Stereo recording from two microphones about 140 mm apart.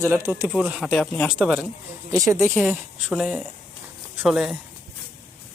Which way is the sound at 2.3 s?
20° right (ahead or behind).